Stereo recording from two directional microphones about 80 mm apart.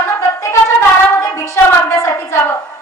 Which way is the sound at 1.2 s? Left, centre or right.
Left.